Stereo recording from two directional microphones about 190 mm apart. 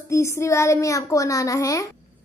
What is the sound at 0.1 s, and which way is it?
A woman's voice, 15° left (ahead or behind).